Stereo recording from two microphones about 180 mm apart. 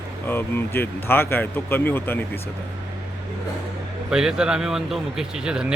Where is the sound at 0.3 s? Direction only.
10° left (ahead or behind).